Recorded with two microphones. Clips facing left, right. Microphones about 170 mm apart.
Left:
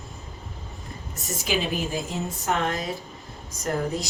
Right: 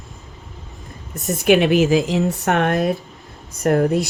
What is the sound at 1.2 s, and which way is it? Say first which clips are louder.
Speech: right 12 dB; 60° right (ahead or behind).